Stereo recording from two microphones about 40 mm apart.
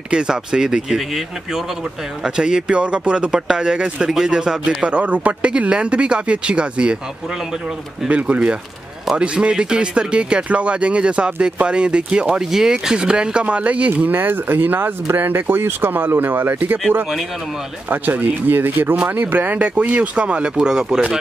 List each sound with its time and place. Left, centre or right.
0.1 s speech: right
4.8 s speech: right
8.1 s speech: right
12.4 s speech: centre; by 14.0 s right
14.0 s speech: right
17.8 s speech: right
18.5 s speech: right; by 21.0 s centre